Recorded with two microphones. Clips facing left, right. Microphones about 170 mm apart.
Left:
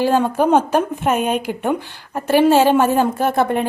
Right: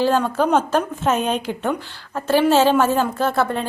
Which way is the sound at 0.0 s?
15° left (ahead or behind).